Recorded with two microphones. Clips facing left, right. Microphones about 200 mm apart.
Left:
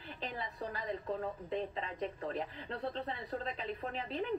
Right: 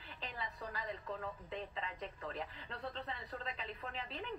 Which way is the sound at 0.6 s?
30° left (ahead or behind).